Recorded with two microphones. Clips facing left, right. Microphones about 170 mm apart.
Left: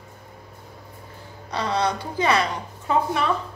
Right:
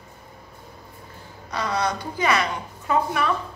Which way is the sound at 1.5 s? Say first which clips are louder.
Left 1 dB; 30° left (ahead or behind).